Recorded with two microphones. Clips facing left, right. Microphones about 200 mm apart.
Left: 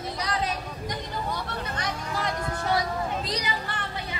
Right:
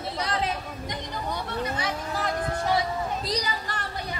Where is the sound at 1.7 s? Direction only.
5° right (ahead or behind).